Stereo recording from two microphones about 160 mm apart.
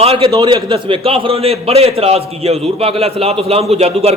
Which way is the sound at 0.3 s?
25° right (ahead or behind).